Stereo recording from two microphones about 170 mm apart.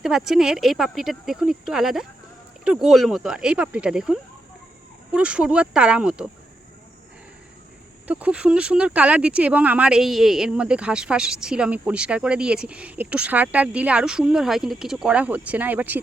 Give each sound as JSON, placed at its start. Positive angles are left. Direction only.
{"t": 0.0, "sound": "speech", "side_deg": 0}
{"t": 8.0, "sound": "speech", "side_deg": -10}